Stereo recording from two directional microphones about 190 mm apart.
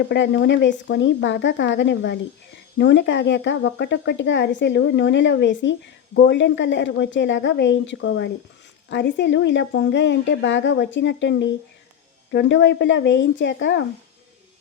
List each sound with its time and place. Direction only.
0.1 s speech: 70° left (ahead or behind)